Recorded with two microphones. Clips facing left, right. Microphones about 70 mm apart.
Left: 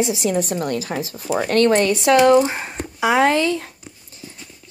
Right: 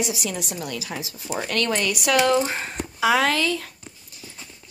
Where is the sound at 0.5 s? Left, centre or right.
Left.